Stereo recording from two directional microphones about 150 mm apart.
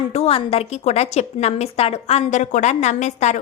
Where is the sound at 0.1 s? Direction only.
40° left (ahead or behind).